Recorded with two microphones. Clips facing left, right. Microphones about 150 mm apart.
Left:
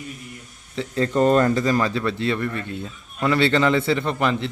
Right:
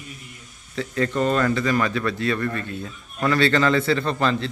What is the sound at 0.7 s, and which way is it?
Speech, 25° left (ahead or behind).